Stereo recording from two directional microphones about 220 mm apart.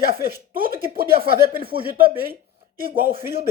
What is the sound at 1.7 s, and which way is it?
Speech, 40° right (ahead or behind).